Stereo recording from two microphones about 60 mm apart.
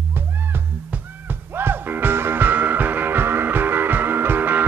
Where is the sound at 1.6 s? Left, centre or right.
Right.